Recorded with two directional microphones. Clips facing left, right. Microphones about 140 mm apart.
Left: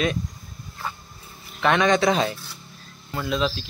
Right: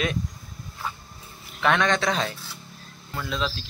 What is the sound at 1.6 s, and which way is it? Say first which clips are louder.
Speech: left 3 dB; centre (ahead or behind).